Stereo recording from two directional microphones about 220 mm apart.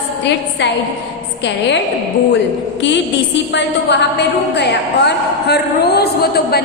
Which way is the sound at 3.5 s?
55° left (ahead or behind).